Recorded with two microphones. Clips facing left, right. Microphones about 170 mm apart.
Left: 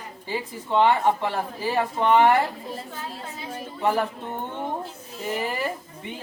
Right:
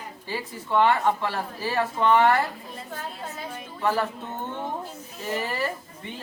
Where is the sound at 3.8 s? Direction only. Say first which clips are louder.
Left 2 dB; 15° left (ahead or behind).